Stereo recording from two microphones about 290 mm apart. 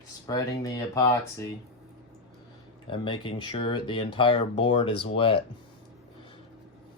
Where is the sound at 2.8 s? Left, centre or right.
Centre.